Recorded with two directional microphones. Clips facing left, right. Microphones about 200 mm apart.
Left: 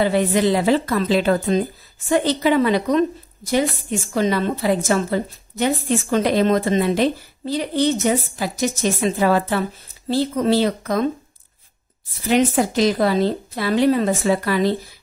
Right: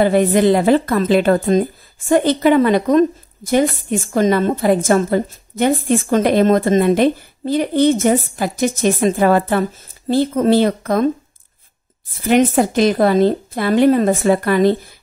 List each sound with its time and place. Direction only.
0.0 s a woman's voice: 50° right (ahead or behind)
12.3 s a woman's voice: 55° right (ahead or behind)